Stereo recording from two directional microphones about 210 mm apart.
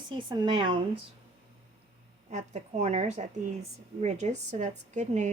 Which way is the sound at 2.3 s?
35° right (ahead or behind).